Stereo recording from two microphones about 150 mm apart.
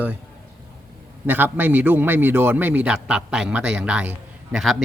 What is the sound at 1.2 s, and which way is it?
A man's voice, 15° right (ahead or behind).